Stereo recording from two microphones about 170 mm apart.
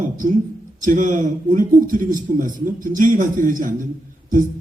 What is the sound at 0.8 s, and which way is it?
A man's voice, 50° right (ahead or behind).